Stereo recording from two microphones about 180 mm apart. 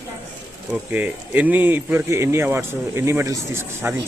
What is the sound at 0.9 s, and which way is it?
Speech, 10° right (ahead or behind).